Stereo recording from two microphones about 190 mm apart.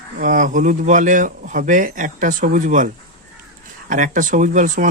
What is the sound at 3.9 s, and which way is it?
Speech, 45° right (ahead or behind).